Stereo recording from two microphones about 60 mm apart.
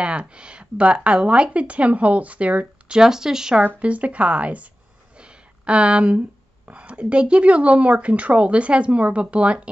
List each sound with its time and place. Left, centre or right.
0.0 s speech: centre
3.0 s speech: centre
3.6 s speech: right
5.1 s a sound: centre
6.7 s speech: centre